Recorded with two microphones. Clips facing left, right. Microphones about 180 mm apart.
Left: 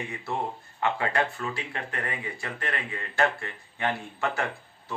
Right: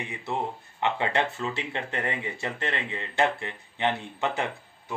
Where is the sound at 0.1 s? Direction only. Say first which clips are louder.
Right 3 dB; 20° right (ahead or behind).